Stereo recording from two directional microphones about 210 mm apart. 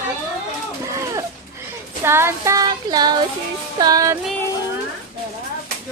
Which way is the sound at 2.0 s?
10° right (ahead or behind).